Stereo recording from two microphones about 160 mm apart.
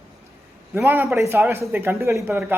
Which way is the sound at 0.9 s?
15° right (ahead or behind).